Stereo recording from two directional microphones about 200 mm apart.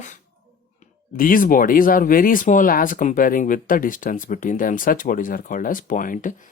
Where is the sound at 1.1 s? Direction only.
45° left (ahead or behind).